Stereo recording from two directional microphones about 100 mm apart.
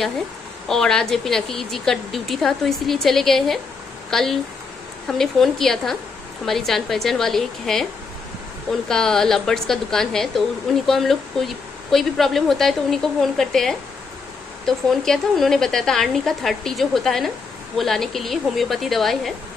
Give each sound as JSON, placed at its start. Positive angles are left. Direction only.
{"t": 0.7, "sound": "a woman's voice", "side_deg": 5}
{"t": 8.8, "sound": "a woman's voice", "side_deg": 5}
{"t": 14.9, "sound": "a woman's voice", "side_deg": 0}